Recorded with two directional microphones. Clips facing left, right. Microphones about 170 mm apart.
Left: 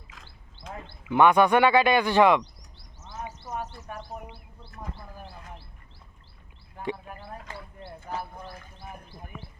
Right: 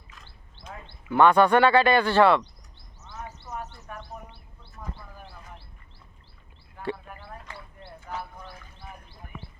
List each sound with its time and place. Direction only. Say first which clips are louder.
0.1 s wild animals: left 1 dB; 90° left
1.0 s speech: right 1 dB; 15° left (ahead or behind)
7.2 s a sound: left 2 dB; 45° left (ahead or behind)